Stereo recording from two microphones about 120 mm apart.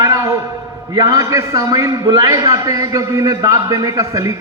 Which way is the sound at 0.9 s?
25° right (ahead or behind).